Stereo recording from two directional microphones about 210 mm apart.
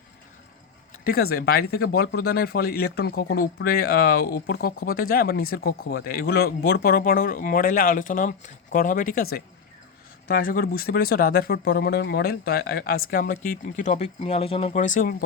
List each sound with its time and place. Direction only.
1.0 s speech: 45° left (ahead or behind)